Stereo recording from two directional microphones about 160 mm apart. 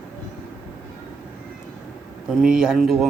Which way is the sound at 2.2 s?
5° right (ahead or behind).